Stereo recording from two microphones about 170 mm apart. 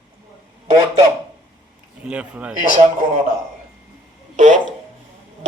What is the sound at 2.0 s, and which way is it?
Speech, 5° right (ahead or behind).